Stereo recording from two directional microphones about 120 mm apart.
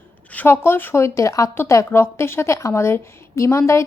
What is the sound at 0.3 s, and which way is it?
A woman's voice, 15° left (ahead or behind).